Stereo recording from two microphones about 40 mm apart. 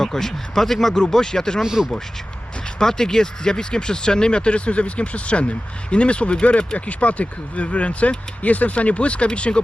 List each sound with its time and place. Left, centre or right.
0.0 s speech: centre
1.6 s speech: centre
2.7 s speech: centre